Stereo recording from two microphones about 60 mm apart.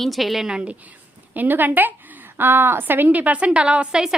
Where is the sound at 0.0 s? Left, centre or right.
Centre.